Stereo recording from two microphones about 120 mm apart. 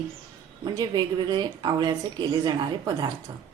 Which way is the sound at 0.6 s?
35° right (ahead or behind).